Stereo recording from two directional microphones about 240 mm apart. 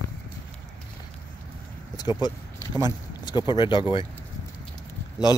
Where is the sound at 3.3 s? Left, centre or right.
Centre.